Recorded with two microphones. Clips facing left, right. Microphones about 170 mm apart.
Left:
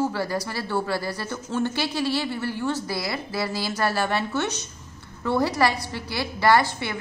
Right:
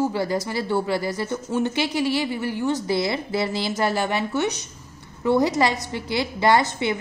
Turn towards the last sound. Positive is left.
turn(degrees=-20)  # may be behind; listen again after turning